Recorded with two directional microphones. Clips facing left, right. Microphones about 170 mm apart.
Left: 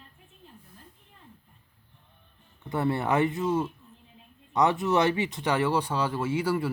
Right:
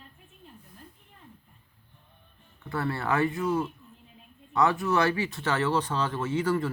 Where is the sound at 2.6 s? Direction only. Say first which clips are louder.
Left 4 dB; 20° left (ahead or behind).